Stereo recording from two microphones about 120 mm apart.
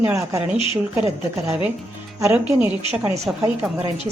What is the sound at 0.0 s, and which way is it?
Speech, 20° right (ahead or behind).